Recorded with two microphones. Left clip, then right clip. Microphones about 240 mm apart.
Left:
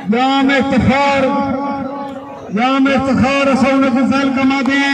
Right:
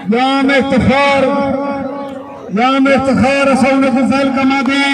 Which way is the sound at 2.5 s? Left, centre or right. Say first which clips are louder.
Right 3 dB; right.